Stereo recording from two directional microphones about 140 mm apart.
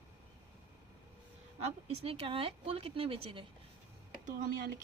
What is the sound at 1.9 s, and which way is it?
Speech, 45° right (ahead or behind).